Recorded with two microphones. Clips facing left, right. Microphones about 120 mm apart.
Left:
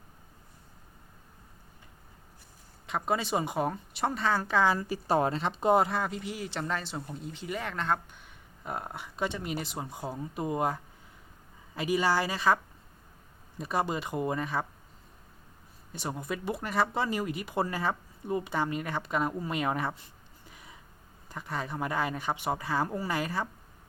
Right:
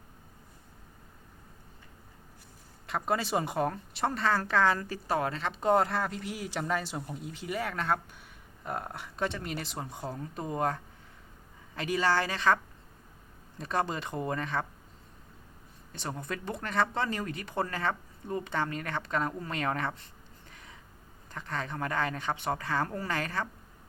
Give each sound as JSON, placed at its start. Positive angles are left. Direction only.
{"t": 2.8, "sound": "speech", "side_deg": 0}
{"t": 5.0, "sound": "speech", "side_deg": 25}
{"t": 5.7, "sound": "speech", "side_deg": 5}
{"t": 13.6, "sound": "speech", "side_deg": 5}
{"t": 15.9, "sound": "speech", "side_deg": 5}
{"t": 20.5, "sound": "a sound", "side_deg": 10}
{"t": 21.2, "sound": "speech", "side_deg": 10}